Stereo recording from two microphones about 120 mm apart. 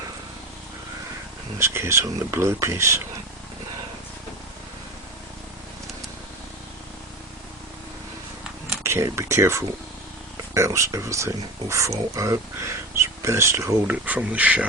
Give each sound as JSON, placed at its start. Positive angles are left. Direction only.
{"t": 1.5, "sound": "speech", "side_deg": -20}
{"t": 8.8, "sound": "speech", "side_deg": -25}